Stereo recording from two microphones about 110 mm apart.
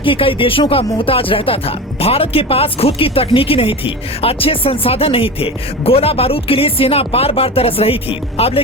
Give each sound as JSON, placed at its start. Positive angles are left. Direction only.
{"t": 0.0, "sound": "speech", "side_deg": 55}